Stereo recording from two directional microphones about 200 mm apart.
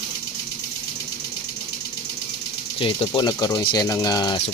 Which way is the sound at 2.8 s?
25° left (ahead or behind).